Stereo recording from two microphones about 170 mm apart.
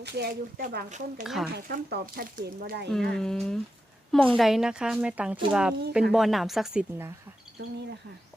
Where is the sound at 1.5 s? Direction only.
65° right (ahead or behind).